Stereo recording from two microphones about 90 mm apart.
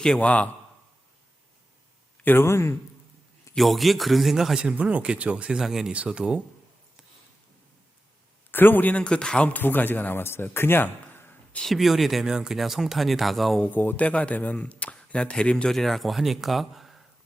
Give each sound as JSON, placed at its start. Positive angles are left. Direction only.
{"t": 0.0, "sound": "speech", "side_deg": 10}
{"t": 2.2, "sound": "a man's voice", "side_deg": 25}
{"t": 3.5, "sound": "a man's voice", "side_deg": 0}
{"t": 8.4, "sound": "a man's voice", "side_deg": 20}
{"t": 11.5, "sound": "speech", "side_deg": 0}
{"t": 13.6, "sound": "speech", "side_deg": 20}